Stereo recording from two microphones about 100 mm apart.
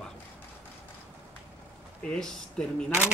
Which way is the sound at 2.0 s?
5° left (ahead or behind).